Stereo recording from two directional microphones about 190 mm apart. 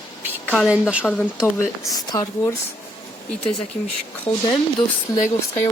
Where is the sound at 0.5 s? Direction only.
5° right (ahead or behind).